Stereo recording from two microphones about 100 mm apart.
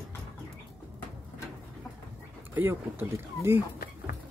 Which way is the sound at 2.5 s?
25° right (ahead or behind).